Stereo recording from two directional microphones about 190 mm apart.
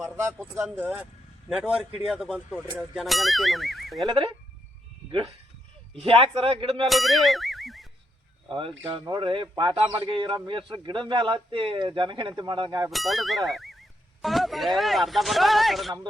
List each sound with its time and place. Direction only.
0.8 s speech: 10° right (ahead or behind)
4.0 s speech: 25° right (ahead or behind)
5.9 s speech: 30° right (ahead or behind)
6.8 s speech: centre (ahead or behind)
8.4 s speech: 25° right (ahead or behind)
12.9 s speech: centre (ahead or behind)